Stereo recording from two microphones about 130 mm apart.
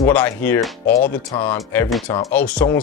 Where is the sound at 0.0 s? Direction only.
15° left (ahead or behind).